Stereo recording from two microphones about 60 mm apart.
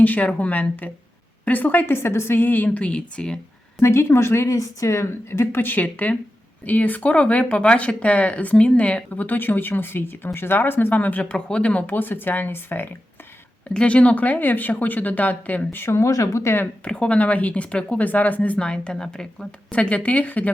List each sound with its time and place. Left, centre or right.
0.0 s a woman's voice: left
2.6 s speech: left
3.8 s a woman's voice: left
11.9 s a woman's voice: left
13.7 s speech: left
15.7 s a woman's voice: left
16.0 s speech: left
16.8 s speech: centre